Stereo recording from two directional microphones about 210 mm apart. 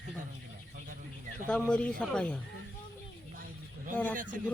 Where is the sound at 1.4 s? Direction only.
5° left (ahead or behind).